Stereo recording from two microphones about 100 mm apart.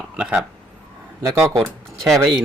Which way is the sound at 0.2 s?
15° right (ahead or behind).